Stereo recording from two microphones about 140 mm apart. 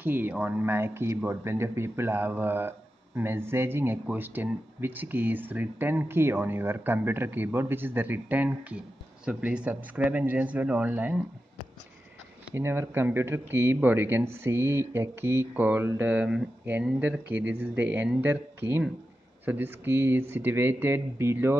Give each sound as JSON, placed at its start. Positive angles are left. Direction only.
{"t": 0.0, "sound": "speech", "side_deg": -15}
{"t": 12.4, "sound": "speech", "side_deg": -15}